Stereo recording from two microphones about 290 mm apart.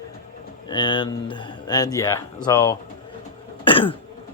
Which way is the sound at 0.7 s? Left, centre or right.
Centre.